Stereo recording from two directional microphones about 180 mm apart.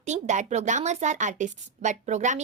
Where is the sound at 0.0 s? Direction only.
40° right (ahead or behind).